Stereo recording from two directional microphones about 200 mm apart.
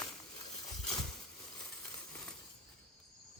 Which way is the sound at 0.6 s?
20° left (ahead or behind).